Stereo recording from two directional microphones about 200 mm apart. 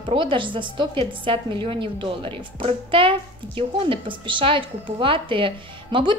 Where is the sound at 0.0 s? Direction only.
25° right (ahead or behind).